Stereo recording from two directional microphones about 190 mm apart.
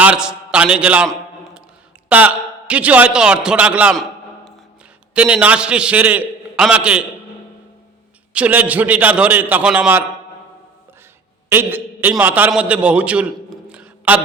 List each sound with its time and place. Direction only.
0.0 s a man's voice: 5° right (ahead or behind)
5.1 s a man's voice: 5° right (ahead or behind)
8.3 s a man's voice: 5° right (ahead or behind)
11.4 s a man's voice: 10° right (ahead or behind)